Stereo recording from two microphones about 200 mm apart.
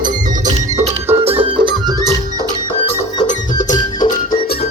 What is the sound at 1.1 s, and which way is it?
Music, 30° right (ahead or behind).